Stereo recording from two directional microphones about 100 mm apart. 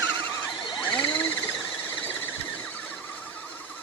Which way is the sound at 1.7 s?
20° left (ahead or behind).